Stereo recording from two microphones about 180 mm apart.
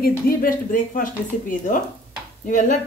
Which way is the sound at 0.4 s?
50° left (ahead or behind).